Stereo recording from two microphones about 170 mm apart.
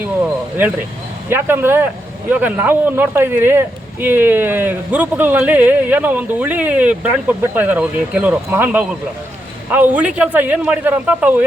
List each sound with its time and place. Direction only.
1.3 s speech: 15° right (ahead or behind)